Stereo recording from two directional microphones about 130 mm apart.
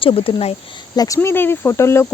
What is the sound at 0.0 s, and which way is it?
Speech, 45° left (ahead or behind).